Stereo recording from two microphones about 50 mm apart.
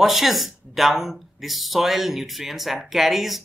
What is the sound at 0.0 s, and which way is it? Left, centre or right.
Speech, centre.